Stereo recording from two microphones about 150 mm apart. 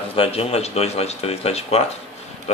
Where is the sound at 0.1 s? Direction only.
40° left (ahead or behind).